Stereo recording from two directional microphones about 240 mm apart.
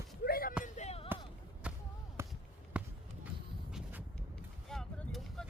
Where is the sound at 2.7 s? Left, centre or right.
Centre.